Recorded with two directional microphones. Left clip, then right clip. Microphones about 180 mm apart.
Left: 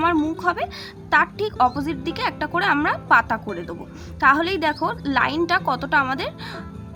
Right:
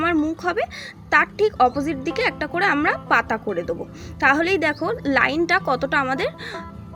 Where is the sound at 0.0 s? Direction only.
10° right (ahead or behind).